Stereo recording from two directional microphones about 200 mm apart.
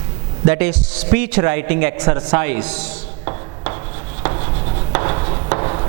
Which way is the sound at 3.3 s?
20° right (ahead or behind).